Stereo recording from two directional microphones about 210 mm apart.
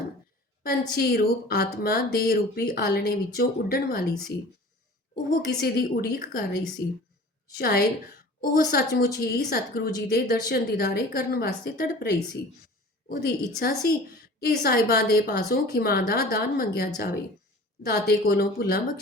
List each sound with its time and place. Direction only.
0.6 s a woman's voice: 45° left (ahead or behind)
5.1 s a woman's voice: 45° left (ahead or behind)
7.6 s a woman's voice: 45° left (ahead or behind)